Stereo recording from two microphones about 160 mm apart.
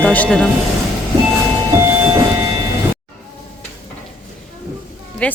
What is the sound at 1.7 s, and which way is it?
Train, 15° right (ahead or behind).